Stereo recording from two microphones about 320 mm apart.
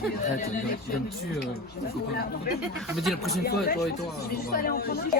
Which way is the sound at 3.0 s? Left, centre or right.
Centre.